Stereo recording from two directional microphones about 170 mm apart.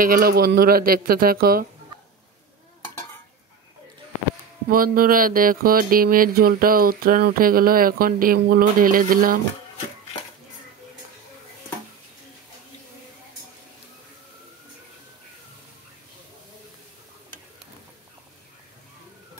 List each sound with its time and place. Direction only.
0.0 s mantra: 60° right (ahead or behind)
4.6 s mantra: 55° right (ahead or behind)